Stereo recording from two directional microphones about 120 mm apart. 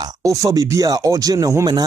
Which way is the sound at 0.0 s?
30° right (ahead or behind).